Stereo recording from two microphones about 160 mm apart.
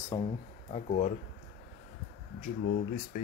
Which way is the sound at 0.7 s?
45° left (ahead or behind).